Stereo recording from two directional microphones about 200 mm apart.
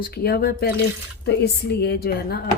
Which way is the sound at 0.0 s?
50° left (ahead or behind).